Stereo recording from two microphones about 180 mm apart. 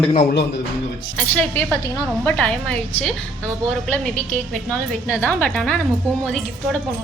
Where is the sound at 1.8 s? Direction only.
25° left (ahead or behind).